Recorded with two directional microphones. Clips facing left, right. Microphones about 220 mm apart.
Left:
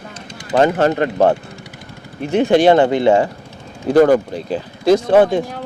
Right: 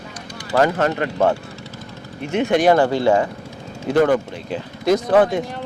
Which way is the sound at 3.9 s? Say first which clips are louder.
Left 5 dB; 40° left (ahead or behind).